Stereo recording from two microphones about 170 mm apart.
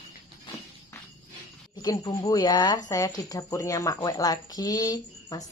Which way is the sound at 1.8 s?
20° left (ahead or behind).